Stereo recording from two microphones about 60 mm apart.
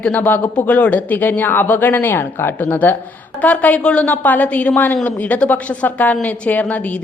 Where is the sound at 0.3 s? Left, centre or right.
Left.